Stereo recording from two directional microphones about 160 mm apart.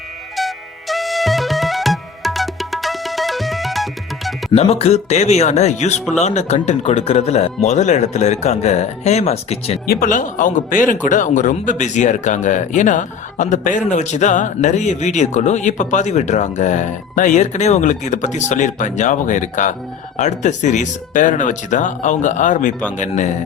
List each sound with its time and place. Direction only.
0.3 s music: centre (ahead or behind)
4.5 s speech: 40° left (ahead or behind)
9.8 s speech: 65° left (ahead or behind); by 23.3 s 50° left (ahead or behind)